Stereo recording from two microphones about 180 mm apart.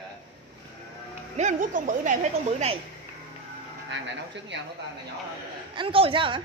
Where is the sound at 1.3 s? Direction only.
40° right (ahead or behind).